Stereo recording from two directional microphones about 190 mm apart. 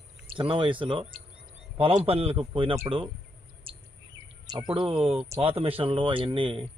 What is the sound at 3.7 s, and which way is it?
Bird, 30° right (ahead or behind).